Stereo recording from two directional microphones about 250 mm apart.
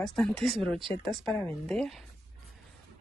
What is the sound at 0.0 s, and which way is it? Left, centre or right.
Speech, centre.